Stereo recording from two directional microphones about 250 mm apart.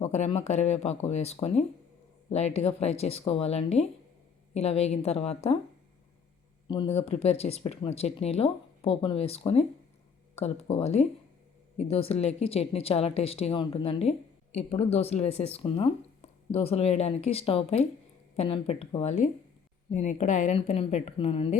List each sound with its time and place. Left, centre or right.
0.0 s a woman's voice: left
6.7 s a woman's voice: left